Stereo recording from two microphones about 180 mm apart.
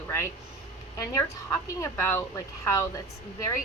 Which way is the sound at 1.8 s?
15° left (ahead or behind).